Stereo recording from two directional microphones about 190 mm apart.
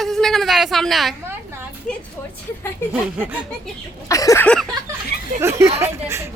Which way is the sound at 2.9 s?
5° right (ahead or behind).